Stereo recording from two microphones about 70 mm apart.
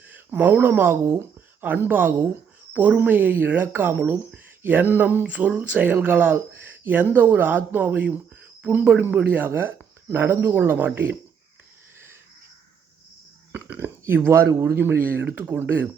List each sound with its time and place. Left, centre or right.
0.3 s speech: right
5.2 s speech: centre
13.5 s a sound: right
14.0 s speech: right